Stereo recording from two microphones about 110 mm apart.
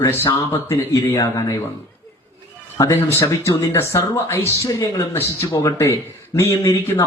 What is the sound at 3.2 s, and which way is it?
Speech, 30° left (ahead or behind).